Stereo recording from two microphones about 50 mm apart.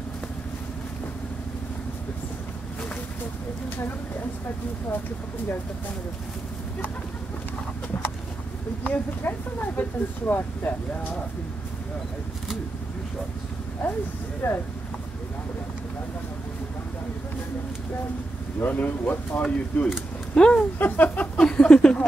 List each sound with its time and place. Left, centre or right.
8.8 s speech: left
14.4 s speech: left
18.7 s speech: left
20.3 s speech: centre
20.8 s speech: left
21.4 s a sound: centre